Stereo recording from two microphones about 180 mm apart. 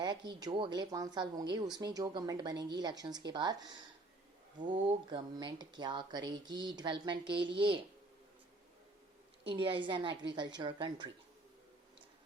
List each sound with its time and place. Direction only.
0.0 s speech: 25° right (ahead or behind)
4.6 s speech: 25° right (ahead or behind)
9.4 s speech: 30° right (ahead or behind)